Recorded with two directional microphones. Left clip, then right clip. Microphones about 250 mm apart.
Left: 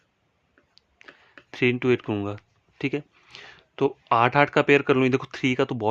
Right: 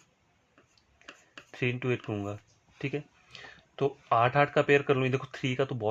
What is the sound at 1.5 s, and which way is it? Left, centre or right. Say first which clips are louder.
Speech: left 9 dB; left.